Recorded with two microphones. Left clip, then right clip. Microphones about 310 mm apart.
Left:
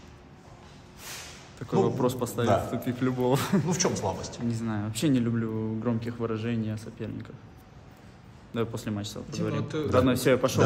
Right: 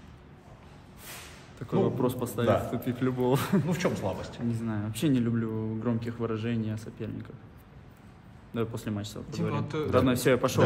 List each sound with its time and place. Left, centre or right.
1.6 s a man's voice: centre
3.6 s speech: centre
4.5 s a man's voice: centre
8.5 s a man's voice: centre
9.5 s a man's voice: centre
9.8 s a man's voice: centre